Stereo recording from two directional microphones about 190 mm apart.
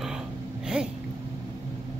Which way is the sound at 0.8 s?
5° right (ahead or behind).